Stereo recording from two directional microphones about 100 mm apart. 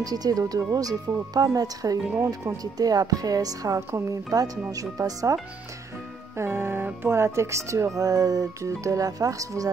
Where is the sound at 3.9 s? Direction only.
25° right (ahead or behind).